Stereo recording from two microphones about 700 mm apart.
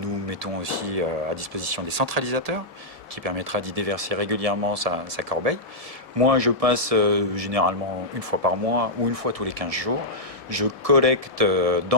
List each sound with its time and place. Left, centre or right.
0.3 s speech: right